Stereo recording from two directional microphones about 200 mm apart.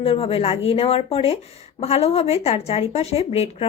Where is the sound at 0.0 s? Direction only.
30° left (ahead or behind).